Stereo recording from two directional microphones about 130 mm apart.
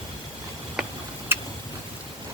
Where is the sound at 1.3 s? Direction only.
15° right (ahead or behind).